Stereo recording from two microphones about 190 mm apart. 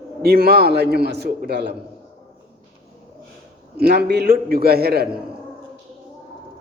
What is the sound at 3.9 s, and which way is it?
A man's voice, 60° right (ahead or behind).